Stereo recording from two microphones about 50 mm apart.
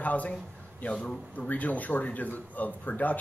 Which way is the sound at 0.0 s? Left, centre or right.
Left.